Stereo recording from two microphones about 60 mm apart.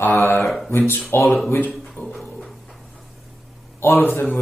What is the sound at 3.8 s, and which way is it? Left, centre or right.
Speech, left.